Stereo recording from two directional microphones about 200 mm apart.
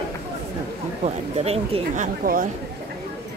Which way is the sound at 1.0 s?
30° right (ahead or behind).